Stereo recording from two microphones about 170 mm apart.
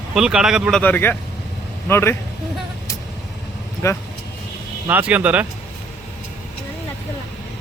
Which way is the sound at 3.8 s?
15° left (ahead or behind).